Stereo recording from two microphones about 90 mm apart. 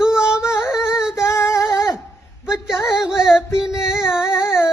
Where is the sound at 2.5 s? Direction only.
5° right (ahead or behind).